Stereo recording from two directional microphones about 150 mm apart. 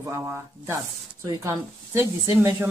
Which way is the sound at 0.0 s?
20° right (ahead or behind).